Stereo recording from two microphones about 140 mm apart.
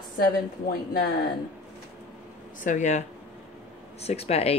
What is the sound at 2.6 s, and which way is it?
Speech, 60° left (ahead or behind).